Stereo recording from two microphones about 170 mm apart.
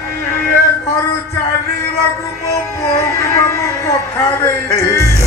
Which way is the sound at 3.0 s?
20° left (ahead or behind).